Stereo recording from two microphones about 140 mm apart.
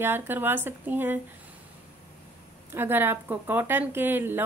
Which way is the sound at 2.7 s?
15° right (ahead or behind).